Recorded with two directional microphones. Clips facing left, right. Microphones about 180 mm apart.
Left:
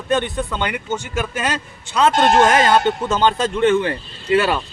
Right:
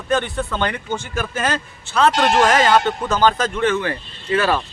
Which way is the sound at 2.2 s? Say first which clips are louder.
Left 4 dB; 25° left (ahead or behind).